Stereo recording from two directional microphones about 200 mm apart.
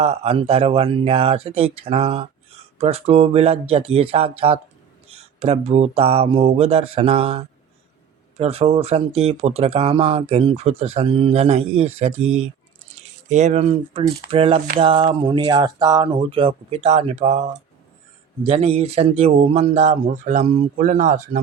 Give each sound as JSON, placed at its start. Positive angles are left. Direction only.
{"t": 0.0, "sound": "speech", "side_deg": -30}
{"t": 13.0, "sound": "a sound", "side_deg": -30}
{"t": 13.3, "sound": "speech", "side_deg": -35}